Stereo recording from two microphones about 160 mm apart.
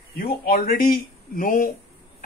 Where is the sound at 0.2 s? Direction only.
65° left (ahead or behind).